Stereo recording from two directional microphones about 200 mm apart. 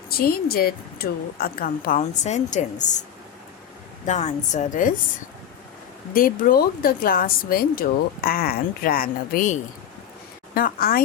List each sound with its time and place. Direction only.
0.2 s speech: 50° left (ahead or behind)
4.0 s a woman's voice: 35° left (ahead or behind)
6.1 s speech: 45° left (ahead or behind)